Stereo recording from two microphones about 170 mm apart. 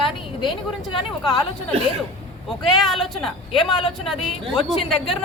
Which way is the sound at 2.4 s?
Centre (ahead or behind).